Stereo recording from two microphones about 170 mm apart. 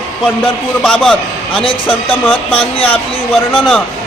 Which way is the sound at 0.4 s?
5° left (ahead or behind).